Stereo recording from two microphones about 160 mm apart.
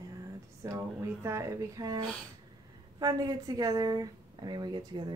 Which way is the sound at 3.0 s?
25° right (ahead or behind).